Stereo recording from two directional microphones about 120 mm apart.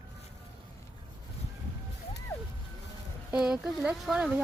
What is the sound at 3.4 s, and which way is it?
Speech, 5° right (ahead or behind).